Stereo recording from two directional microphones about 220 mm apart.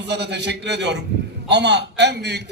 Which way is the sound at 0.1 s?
50° right (ahead or behind).